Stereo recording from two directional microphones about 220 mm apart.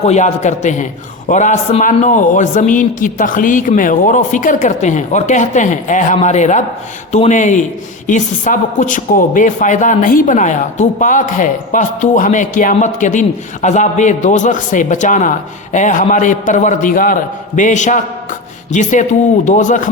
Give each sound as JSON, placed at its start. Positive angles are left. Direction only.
{"t": 0.0, "sound": "a woman's voice", "side_deg": 30}